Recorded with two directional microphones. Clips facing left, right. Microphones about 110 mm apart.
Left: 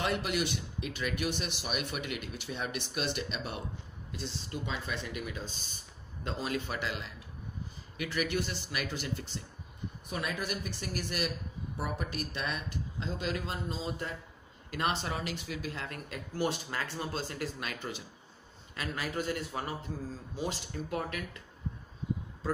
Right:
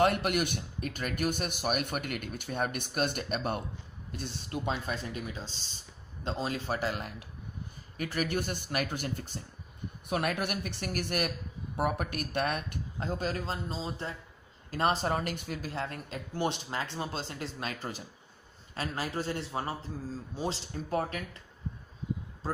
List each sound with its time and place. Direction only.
0.0 s speech: 55° right (ahead or behind)
5.1 s speech: 30° right (ahead or behind); by 9.4 s 45° right (ahead or behind)
10.0 s speech: 60° right (ahead or behind); by 21.4 s 35° right (ahead or behind)